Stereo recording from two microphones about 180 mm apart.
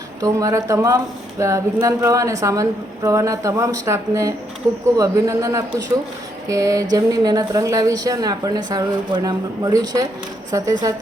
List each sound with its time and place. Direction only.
0.2 s a woman's voice: 15° right (ahead or behind)